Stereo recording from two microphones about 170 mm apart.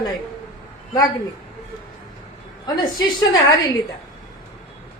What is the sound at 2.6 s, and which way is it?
Speech, 25° left (ahead or behind).